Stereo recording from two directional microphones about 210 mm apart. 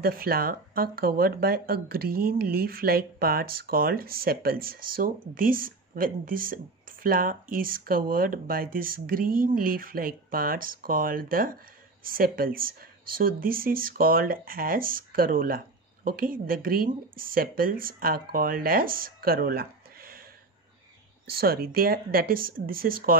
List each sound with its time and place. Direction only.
0.0 s speech: 45° right (ahead or behind)
21.3 s speech: 45° right (ahead or behind)